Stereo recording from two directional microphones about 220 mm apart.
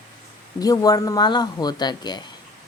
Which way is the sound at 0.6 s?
15° left (ahead or behind).